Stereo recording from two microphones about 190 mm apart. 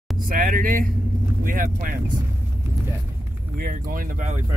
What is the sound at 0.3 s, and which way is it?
Speech, 50° right (ahead or behind).